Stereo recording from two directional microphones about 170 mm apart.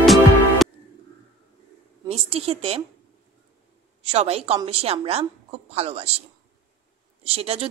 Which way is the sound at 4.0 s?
35° right (ahead or behind).